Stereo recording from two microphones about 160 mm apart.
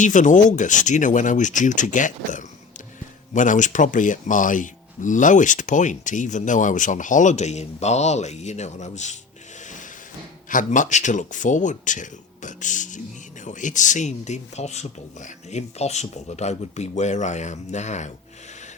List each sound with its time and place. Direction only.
0.0 s speech: 50° left (ahead or behind)
9.6 s a sound: 50° left (ahead or behind)
10.5 s speech: 55° left (ahead or behind)